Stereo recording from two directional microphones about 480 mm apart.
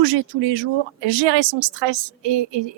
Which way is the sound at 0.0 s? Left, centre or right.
Right.